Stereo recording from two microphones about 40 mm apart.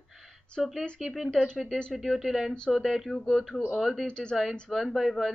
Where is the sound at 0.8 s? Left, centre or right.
Centre.